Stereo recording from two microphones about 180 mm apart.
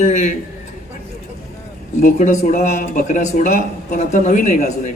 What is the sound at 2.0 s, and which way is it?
Speech, 40° left (ahead or behind).